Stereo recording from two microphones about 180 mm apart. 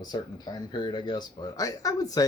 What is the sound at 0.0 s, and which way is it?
Speech, 20° left (ahead or behind).